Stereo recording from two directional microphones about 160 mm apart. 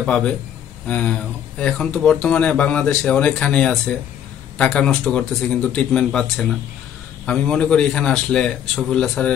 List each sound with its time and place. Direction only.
0.0 s a man's voice: 5° left (ahead or behind)